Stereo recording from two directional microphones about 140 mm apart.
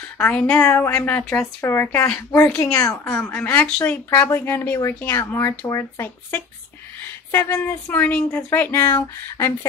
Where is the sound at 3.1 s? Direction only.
5° left (ahead or behind).